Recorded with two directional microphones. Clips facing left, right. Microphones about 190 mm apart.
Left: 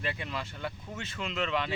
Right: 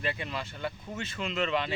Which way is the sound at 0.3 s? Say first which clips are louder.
Right 1 dB; 15° right (ahead or behind).